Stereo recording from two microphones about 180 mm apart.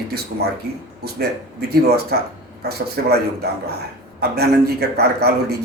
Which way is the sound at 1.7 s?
60° right (ahead or behind).